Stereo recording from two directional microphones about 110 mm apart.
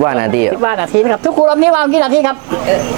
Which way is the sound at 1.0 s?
25° right (ahead or behind).